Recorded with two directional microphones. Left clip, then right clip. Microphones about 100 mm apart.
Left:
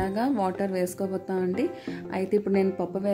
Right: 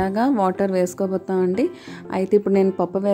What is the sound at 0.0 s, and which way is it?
A woman's voice, 45° right (ahead or behind).